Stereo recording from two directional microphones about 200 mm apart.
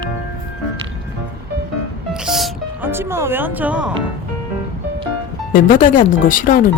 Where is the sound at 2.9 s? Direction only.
10° right (ahead or behind).